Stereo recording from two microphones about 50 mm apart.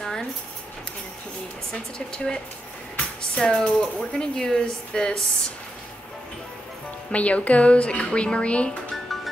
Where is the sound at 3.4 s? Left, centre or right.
Centre.